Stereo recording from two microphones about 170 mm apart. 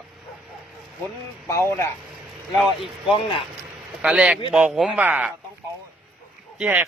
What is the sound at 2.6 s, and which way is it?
Speech, centre (ahead or behind).